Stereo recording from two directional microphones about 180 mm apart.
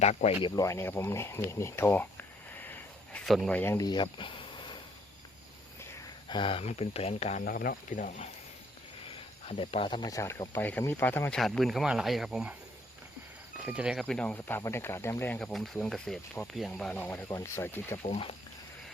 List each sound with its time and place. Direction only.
0.0 s speech: 40° left (ahead or behind)
0.4 s speech: 20° left (ahead or behind); by 3.6 s centre (ahead or behind)
3.6 s speech: 15° left (ahead or behind)
6.2 s speech: 25° left (ahead or behind)
7.4 s speech: 55° left (ahead or behind)
9.5 s speech: 30° left (ahead or behind); by 11.3 s 10° left (ahead or behind)
11.3 s speech: centre (ahead or behind)
13.7 s speech: 5° right (ahead or behind)
14.0 s speech: 5° left (ahead or behind)
18.0 s speech: 30° left (ahead or behind)